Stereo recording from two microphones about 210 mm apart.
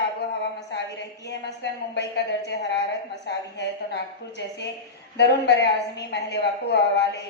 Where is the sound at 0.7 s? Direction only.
55° left (ahead or behind).